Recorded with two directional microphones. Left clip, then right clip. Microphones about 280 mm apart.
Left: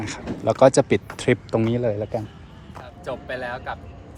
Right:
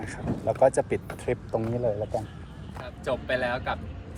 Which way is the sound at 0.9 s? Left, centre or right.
Centre.